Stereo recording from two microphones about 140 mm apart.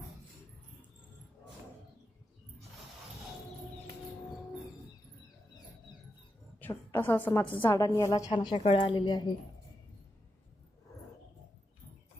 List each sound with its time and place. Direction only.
6.6 s a woman's voice: 15° left (ahead or behind)
7.8 s a woman's voice: 25° left (ahead or behind)